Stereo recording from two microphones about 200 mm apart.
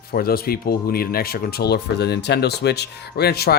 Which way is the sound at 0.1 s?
50° left (ahead or behind).